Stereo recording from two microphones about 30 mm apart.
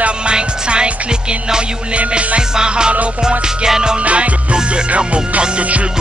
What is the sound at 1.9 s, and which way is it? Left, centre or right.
Music, right.